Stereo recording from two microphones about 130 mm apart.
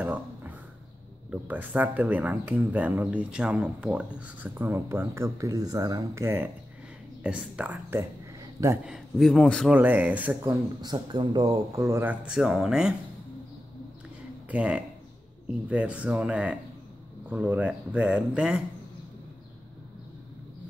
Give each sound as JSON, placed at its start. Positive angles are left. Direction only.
{"t": 0.0, "sound": "a sound", "side_deg": -10}
{"t": 1.3, "sound": "speech", "side_deg": -10}
{"t": 8.8, "sound": "a man's voice", "side_deg": 0}
{"t": 9.7, "sound": "speech", "side_deg": -10}
{"t": 10.8, "sound": "speech", "side_deg": -35}
{"t": 11.7, "sound": "speech", "side_deg": -20}
{"t": 12.4, "sound": "a man's voice", "side_deg": 0}
{"t": 14.5, "sound": "speech", "side_deg": -10}